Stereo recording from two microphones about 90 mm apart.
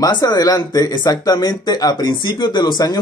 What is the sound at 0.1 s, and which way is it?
A man's voice, 50° left (ahead or behind).